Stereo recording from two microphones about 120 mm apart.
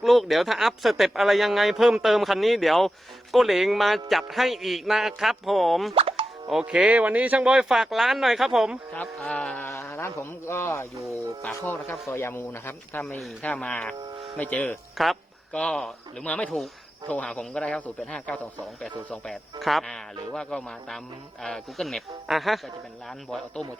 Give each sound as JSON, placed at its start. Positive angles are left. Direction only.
{"t": 0.0, "sound": "speech", "side_deg": 0}
{"t": 5.9, "sound": "plop", "side_deg": -50}
{"t": 6.5, "sound": "speech", "side_deg": -5}
{"t": 9.0, "sound": "speech", "side_deg": 10}
{"t": 9.6, "sound": "speech", "side_deg": 25}
{"t": 13.0, "sound": "speech", "side_deg": 5}
{"t": 14.9, "sound": "speech", "side_deg": 0}